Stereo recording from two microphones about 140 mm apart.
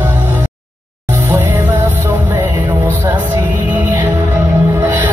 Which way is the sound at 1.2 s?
15° right (ahead or behind).